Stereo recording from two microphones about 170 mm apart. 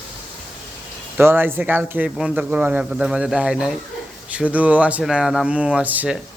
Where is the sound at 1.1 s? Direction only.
10° right (ahead or behind).